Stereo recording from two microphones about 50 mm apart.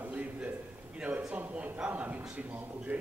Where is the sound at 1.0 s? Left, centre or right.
Right.